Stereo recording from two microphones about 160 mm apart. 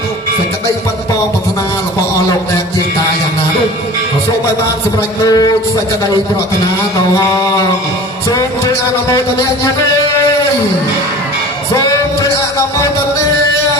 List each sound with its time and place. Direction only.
5.2 s speech: 25° left (ahead or behind)